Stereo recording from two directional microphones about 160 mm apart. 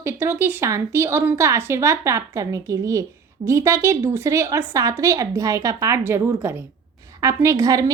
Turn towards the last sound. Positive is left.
turn(degrees=-20)  # may be behind; listen again after turning